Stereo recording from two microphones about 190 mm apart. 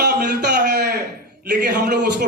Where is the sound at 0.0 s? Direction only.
60° right (ahead or behind).